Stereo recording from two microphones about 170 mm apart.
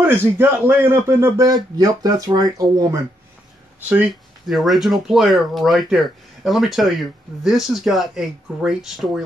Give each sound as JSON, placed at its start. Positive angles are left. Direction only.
{"t": 0.0, "sound": "a man's voice", "side_deg": -10}
{"t": 3.9, "sound": "speech", "side_deg": 0}